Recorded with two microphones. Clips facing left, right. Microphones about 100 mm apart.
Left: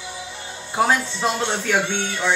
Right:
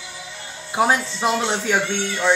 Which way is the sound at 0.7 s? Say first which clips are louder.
Right 1 dB; 10° right (ahead or behind).